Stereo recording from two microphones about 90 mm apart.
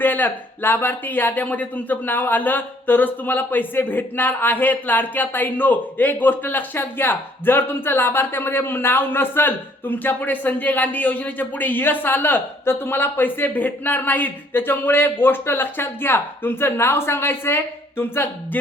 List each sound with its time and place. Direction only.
0.0 s speech: 20° left (ahead or behind)